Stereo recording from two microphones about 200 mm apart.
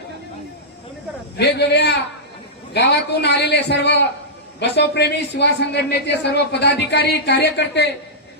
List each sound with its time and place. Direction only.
1.4 s speech: 55° left (ahead or behind)